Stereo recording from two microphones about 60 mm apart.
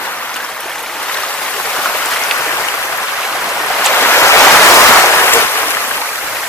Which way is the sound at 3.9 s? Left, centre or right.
Left.